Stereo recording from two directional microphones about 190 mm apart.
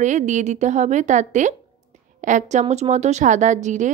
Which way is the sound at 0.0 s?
40° right (ahead or behind).